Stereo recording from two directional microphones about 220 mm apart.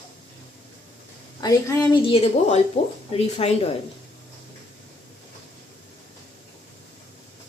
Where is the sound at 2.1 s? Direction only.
25° left (ahead or behind).